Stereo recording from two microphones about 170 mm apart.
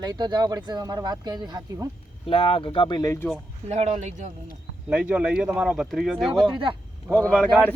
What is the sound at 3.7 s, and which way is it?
Speech, 40° right (ahead or behind).